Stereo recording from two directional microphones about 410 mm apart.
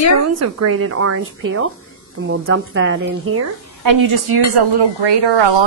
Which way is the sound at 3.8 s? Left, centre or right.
Right.